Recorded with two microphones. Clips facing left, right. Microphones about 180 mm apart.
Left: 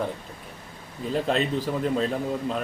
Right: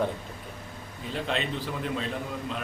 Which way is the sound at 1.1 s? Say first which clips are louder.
Left 6 dB; 40° left (ahead or behind).